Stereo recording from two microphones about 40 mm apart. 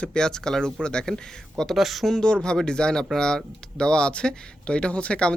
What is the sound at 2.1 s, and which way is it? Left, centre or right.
Speech, left.